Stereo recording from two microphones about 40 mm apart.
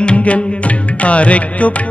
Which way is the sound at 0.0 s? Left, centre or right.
Left.